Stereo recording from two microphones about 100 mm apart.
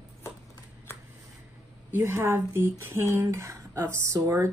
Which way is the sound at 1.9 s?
25° right (ahead or behind).